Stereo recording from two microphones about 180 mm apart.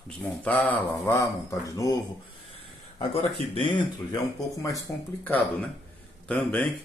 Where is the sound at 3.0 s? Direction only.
35° left (ahead or behind).